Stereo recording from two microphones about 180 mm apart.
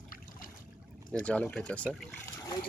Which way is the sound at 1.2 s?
5° left (ahead or behind).